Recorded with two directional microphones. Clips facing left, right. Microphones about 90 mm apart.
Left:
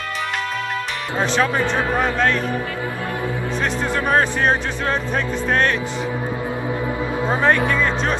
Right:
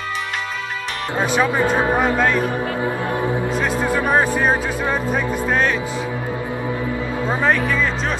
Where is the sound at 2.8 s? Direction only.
25° right (ahead or behind).